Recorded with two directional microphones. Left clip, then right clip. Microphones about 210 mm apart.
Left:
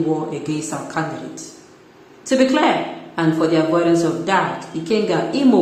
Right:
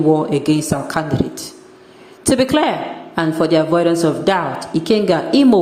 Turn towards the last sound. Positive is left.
turn(degrees=-35)  # may be behind; listen again after turning